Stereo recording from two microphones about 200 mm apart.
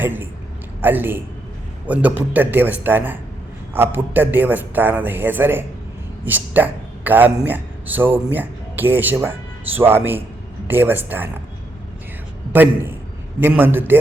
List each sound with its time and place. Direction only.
0.0 s a man's voice: 10° right (ahead or behind)
13.4 s a man's voice: 10° right (ahead or behind)